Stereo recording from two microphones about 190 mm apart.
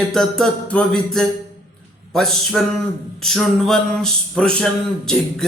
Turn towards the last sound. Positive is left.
turn(degrees=0)  # may be behind; listen again after turning